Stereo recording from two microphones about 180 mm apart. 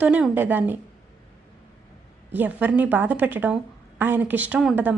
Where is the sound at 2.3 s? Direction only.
10° right (ahead or behind).